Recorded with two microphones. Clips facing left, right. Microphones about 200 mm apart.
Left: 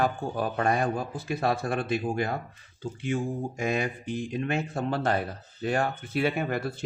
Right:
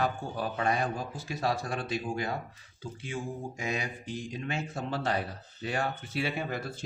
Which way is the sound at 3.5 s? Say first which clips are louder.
Left 7 dB; 55° left (ahead or behind).